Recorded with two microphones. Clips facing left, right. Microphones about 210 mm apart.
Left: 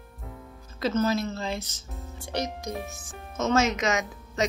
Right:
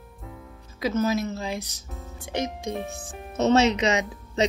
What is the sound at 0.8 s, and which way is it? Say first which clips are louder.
Speech: right 1 dB; 15° right (ahead or behind).